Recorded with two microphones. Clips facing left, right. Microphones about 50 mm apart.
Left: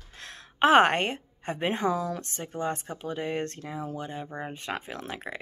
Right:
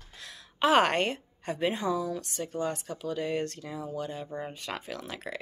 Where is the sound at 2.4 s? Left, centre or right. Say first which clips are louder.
Left 1 dB; left.